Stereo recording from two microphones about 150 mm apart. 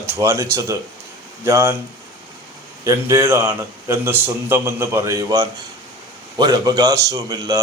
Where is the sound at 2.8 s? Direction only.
20° right (ahead or behind).